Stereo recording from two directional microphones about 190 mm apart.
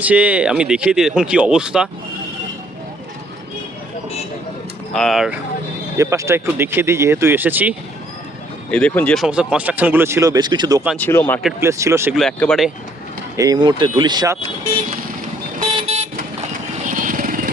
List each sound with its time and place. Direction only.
0.0 s speech: 5° right (ahead or behind)
4.9 s speech: centre (ahead or behind)
6.0 s speech: 15° right (ahead or behind)
8.7 s speech: 5° left (ahead or behind)
9.2 s speech: 5° right (ahead or behind); by 10.8 s 20° right (ahead or behind)
10.9 s speech: 10° left (ahead or behind)
11.6 s speech: 15° right (ahead or behind)
12.1 s speech: centre (ahead or behind)
13.3 s speech: 20° right (ahead or behind)
15.5 s vehicle: 40° right (ahead or behind)